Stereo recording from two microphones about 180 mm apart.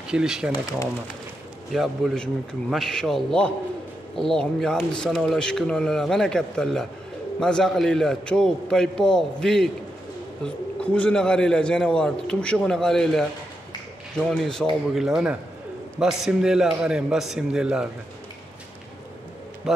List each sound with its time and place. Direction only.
0.1 s a man's voice: 5° right (ahead or behind)
0.5 s speech: 20° left (ahead or behind)
1.7 s a man's voice: centre (ahead or behind)